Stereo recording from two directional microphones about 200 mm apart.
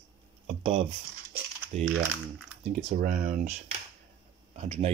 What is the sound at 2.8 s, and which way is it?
Speech, 40° right (ahead or behind).